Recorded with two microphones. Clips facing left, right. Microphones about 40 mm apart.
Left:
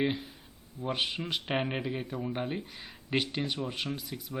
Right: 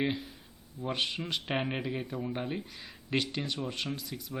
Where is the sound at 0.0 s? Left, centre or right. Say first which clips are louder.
Left 1 dB; centre.